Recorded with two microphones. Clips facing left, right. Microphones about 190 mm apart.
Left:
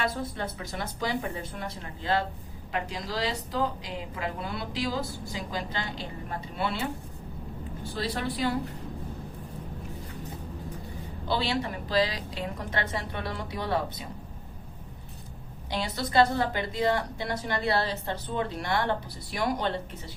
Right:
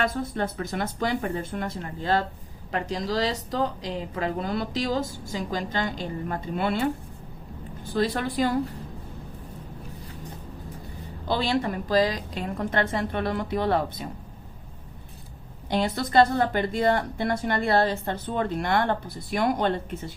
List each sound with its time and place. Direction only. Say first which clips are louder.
0.0 s a woman's voice: right 4 dB; 50° right (ahead or behind)
7.9 s a woman's voice: right 7 dB; 45° right (ahead or behind)
11.3 s a woman's voice: right 4 dB; 45° right (ahead or behind)
15.7 s a woman's voice: right 5 dB; 50° right (ahead or behind)